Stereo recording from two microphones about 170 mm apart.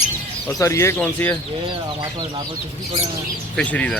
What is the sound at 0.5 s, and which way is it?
Speech, 15° left (ahead or behind).